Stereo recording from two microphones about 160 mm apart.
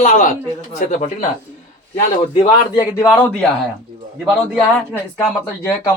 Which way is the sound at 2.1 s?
35° left (ahead or behind).